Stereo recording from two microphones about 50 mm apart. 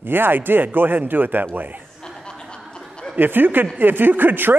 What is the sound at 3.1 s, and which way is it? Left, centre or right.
Speech, right.